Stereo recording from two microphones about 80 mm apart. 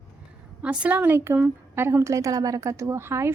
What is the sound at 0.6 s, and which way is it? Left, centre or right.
A woman's voice, centre.